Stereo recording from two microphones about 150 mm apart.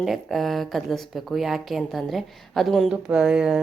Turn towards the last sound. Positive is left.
turn(degrees=-5)  # may be behind; listen again after turning